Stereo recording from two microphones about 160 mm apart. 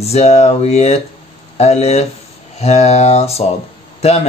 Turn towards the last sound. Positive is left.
turn(degrees=40)  # may be behind; listen again after turning